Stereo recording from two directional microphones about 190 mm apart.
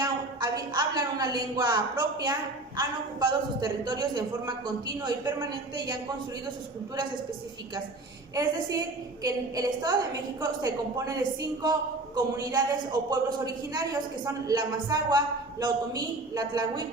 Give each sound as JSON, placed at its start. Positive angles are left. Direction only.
{"t": 0.0, "sound": "a woman's voice", "side_deg": -20}
{"t": 8.4, "sound": "a woman's voice", "side_deg": -20}